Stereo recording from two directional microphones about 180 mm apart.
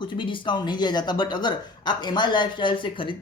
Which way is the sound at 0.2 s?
25° left (ahead or behind).